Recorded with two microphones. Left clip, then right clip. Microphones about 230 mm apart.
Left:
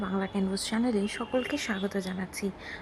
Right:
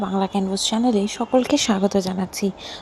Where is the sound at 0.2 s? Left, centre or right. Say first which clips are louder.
Right 10 dB; centre.